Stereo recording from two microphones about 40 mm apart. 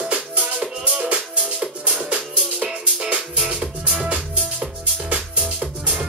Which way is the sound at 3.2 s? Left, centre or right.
Centre.